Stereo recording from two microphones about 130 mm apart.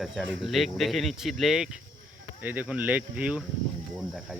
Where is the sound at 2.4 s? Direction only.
10° right (ahead or behind).